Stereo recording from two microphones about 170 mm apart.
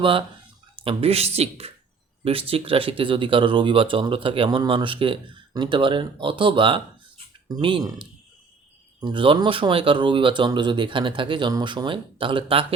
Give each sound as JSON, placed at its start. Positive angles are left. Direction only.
{"t": 0.0, "sound": "speech", "side_deg": -30}